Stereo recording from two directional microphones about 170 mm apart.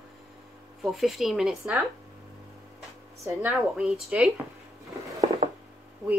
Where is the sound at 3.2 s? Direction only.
10° right (ahead or behind).